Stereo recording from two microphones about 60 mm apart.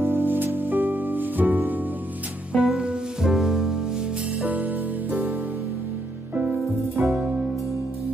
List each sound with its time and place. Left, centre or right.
0.0 s music: right
2.5 s music: centre
4.5 s music: right
7.0 s music: right